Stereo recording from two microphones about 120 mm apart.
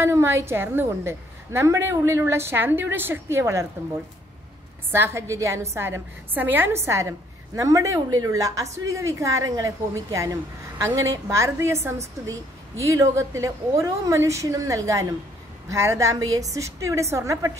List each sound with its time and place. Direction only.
0.0 s a woman's voice: 25° right (ahead or behind)
4.9 s a woman's voice: 20° right (ahead or behind)